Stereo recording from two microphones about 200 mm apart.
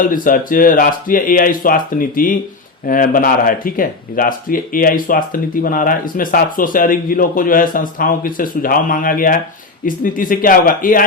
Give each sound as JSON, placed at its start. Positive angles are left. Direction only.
{"t": 0.0, "sound": "speech", "side_deg": 45}